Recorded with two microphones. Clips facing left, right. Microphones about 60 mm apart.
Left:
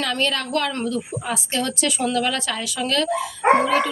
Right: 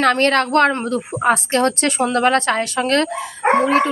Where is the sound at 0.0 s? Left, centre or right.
Right.